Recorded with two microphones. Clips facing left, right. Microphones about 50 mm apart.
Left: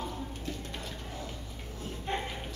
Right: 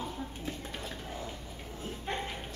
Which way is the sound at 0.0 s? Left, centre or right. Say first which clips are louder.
Even; centre.